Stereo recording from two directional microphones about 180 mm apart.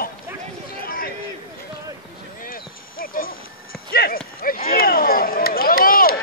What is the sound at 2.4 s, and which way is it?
Music, 50° left (ahead or behind).